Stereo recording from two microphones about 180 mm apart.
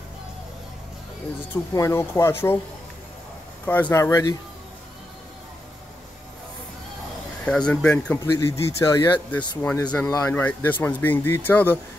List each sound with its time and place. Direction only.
1.7 s speech: 15° left (ahead or behind)
3.6 s speech: 10° left (ahead or behind)
7.4 s speech: 5° left (ahead or behind)
8.2 s speech: 15° left (ahead or behind)